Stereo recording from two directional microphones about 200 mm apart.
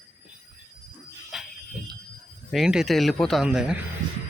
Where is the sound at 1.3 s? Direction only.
Centre (ahead or behind).